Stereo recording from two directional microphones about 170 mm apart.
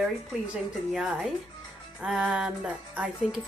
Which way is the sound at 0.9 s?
5° right (ahead or behind).